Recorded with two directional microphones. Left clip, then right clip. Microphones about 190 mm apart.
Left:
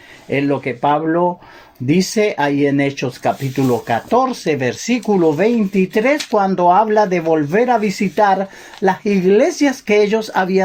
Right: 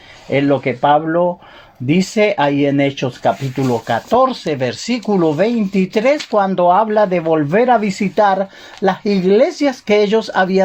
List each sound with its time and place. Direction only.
0.3 s speech: 30° right (ahead or behind)